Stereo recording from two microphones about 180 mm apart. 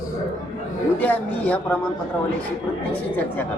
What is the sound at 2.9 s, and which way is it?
Speech, 10° left (ahead or behind).